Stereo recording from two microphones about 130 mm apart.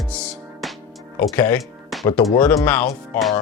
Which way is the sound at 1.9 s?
Centre (ahead or behind).